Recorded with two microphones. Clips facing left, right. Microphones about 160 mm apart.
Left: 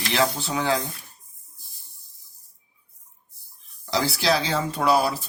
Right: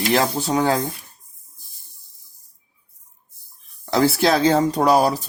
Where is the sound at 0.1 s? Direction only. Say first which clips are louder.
Right 3 dB; 45° right (ahead or behind).